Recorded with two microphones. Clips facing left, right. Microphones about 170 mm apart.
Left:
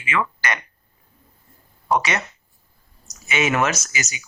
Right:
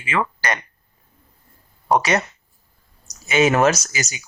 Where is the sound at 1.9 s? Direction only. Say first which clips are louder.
Right 3 dB; 40° right (ahead or behind).